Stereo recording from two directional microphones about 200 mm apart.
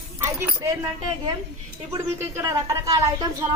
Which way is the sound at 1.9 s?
15° right (ahead or behind).